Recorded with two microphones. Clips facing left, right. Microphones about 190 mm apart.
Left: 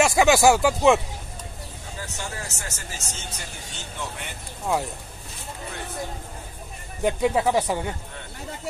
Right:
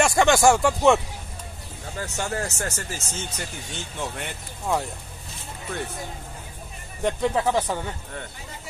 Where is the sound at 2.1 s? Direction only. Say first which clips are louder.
Right 10 dB; 55° right (ahead or behind).